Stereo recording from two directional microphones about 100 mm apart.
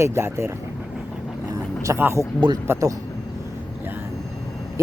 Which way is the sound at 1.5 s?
35° right (ahead or behind).